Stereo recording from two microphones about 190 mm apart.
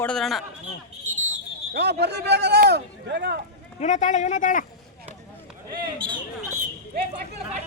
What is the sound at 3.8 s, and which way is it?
Speech, 40° left (ahead or behind).